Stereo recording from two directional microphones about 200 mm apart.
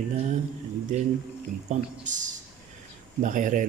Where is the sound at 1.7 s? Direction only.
40° right (ahead or behind).